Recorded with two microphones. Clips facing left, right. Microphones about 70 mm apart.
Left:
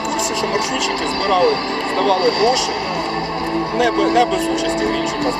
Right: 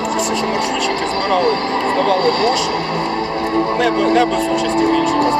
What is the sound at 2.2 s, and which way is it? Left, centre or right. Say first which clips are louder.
Speech: even; right.